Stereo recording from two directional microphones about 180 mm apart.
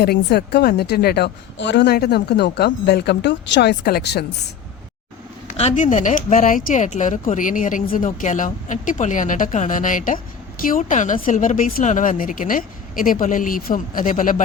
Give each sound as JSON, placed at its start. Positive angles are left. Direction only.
{"t": 0.0, "sound": "a woman's voice", "side_deg": 60}
{"t": 5.5, "sound": "speech", "side_deg": 40}